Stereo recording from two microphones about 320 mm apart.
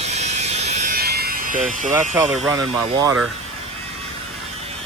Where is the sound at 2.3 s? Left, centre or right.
Centre.